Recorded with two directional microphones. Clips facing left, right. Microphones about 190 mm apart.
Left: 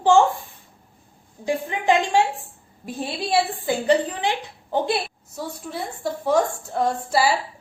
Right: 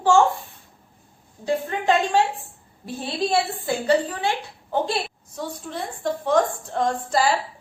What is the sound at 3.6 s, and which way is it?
A woman's voice, 15° left (ahead or behind).